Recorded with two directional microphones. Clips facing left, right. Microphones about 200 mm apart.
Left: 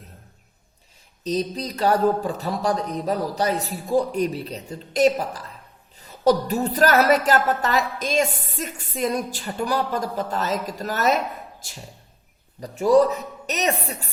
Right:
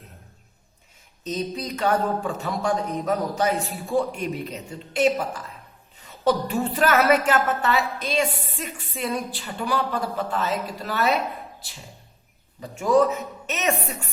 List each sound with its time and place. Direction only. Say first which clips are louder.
1.2 s a woman's voice: left 3 dB; 35° left (ahead or behind)
12.5 s a woman's voice: left 3 dB; 35° left (ahead or behind)